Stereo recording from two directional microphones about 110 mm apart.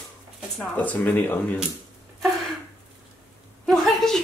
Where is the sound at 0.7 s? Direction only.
15° left (ahead or behind).